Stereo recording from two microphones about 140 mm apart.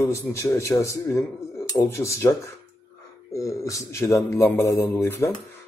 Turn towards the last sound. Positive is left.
turn(degrees=20)  # may be behind; listen again after turning